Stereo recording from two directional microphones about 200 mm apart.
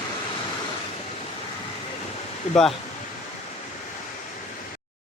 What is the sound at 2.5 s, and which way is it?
Speech, centre (ahead or behind).